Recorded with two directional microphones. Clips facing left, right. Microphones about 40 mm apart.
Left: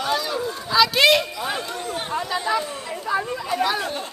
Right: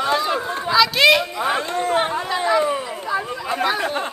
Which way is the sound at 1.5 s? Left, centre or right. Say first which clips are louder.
Right 8 dB; right.